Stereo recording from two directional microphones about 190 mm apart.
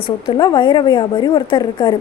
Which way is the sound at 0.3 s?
25° left (ahead or behind).